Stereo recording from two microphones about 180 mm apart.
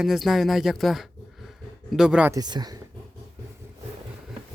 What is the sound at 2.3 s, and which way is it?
Speech, 20° right (ahead or behind).